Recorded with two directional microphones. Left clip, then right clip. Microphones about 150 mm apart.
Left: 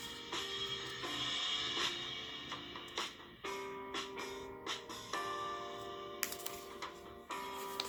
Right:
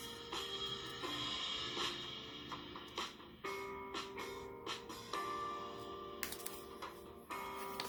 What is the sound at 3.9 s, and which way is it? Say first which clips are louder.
Music: left 3 dB; 20° left (ahead or behind).